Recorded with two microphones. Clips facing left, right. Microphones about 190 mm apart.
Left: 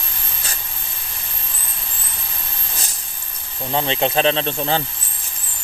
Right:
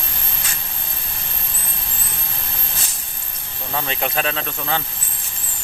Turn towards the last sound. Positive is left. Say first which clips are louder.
# left 5 dB
turn(degrees=30)  # may be behind; listen again after turning